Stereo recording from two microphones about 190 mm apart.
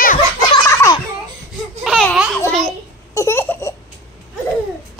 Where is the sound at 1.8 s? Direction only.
Centre (ahead or behind).